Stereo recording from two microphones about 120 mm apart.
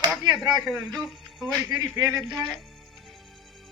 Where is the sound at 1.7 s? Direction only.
35° right (ahead or behind).